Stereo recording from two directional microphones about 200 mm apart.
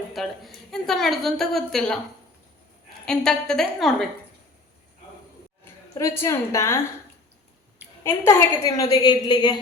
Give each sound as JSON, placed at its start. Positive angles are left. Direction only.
{"t": 0.1, "sound": "a woman's voice", "side_deg": 0}
{"t": 3.1, "sound": "a woman's voice", "side_deg": 5}
{"t": 5.9, "sound": "a woman's voice", "side_deg": 15}
{"t": 8.0, "sound": "a woman's voice", "side_deg": 10}